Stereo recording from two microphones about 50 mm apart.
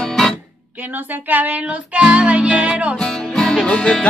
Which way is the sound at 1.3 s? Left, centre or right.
Right.